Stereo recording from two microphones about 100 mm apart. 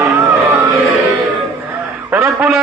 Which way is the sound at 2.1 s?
15° right (ahead or behind).